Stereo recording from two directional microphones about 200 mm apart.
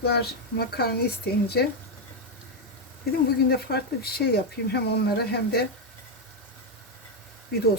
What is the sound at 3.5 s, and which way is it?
Speech, 50° left (ahead or behind).